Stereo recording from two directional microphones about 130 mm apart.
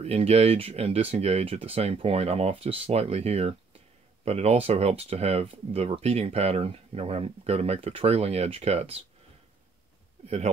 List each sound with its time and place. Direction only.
0.0 s speech: 50° right (ahead or behind)
10.2 s speech: 55° right (ahead or behind)